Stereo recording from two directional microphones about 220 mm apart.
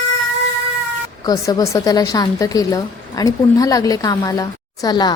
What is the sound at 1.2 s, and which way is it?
A woman's voice, 15° left (ahead or behind).